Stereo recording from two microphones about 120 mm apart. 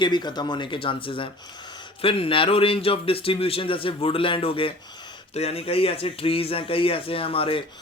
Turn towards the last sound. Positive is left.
turn(degrees=50)  # may be behind; listen again after turning